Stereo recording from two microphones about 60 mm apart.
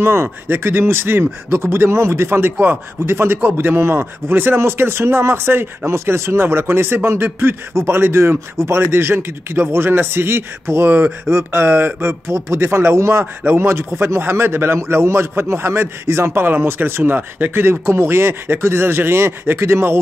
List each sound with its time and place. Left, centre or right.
0.0 s speech: right
2.5 s speech: right
3.0 s speech: right
13.2 s speech: right